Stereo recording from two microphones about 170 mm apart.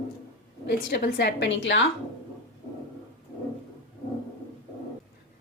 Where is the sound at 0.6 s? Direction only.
70° left (ahead or behind); by 1.8 s 90° left.